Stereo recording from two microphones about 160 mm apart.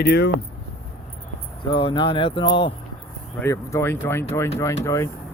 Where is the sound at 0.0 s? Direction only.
90° left.